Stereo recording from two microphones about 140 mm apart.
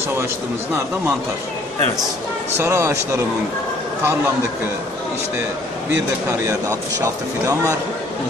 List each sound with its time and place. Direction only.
2.5 s speech: 20° right (ahead or behind)
6.7 s speech: 20° right (ahead or behind)